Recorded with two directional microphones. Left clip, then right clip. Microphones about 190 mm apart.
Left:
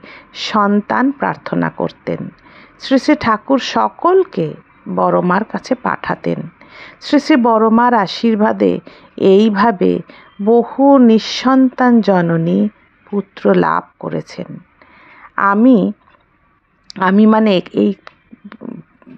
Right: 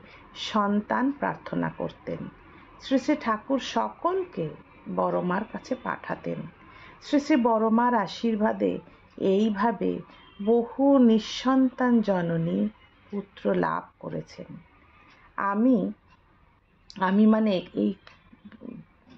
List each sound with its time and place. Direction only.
0.0 s speech: 35° left (ahead or behind)
16.8 s speech: 35° left (ahead or behind)